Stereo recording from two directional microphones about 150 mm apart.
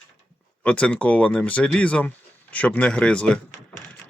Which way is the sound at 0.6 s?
10° left (ahead or behind).